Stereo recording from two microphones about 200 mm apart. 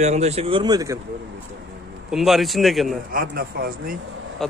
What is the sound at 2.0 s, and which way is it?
Speech, centre (ahead or behind).